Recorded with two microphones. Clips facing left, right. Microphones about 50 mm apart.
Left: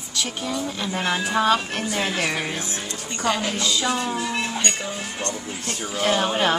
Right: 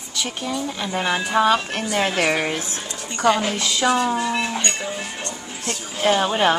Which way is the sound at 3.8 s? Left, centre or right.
Right.